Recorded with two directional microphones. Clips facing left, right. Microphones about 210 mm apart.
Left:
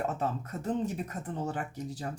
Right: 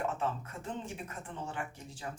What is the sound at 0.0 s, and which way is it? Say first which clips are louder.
Speech: left 3 dB; 40° left (ahead or behind).